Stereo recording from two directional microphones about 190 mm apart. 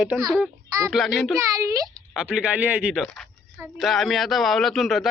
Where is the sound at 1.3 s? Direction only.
15° right (ahead or behind).